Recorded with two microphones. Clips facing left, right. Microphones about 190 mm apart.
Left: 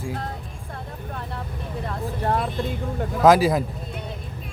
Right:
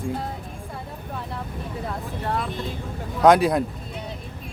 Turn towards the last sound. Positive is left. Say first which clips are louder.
# even
turn(degrees=0)  # may be behind; listen again after turning